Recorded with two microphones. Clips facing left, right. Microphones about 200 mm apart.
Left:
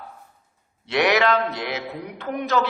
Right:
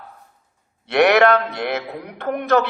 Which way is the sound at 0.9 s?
55° right (ahead or behind).